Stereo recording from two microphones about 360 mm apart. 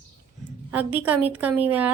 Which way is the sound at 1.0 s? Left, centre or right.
Centre.